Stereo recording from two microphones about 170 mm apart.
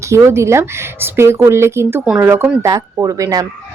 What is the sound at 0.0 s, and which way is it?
Speech, 15° right (ahead or behind).